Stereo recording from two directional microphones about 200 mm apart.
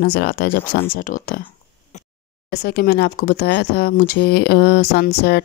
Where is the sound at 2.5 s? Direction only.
55° left (ahead or behind).